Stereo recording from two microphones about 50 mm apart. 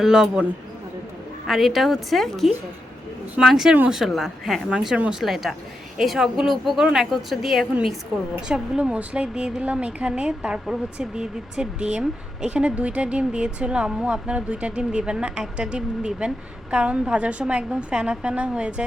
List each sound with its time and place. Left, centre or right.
0.0 s a man's voice: centre
1.5 s a woman's voice: centre
8.4 s speech: centre